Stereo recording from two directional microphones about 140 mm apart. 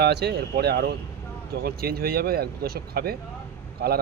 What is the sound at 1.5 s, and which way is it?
Speech, 90° right.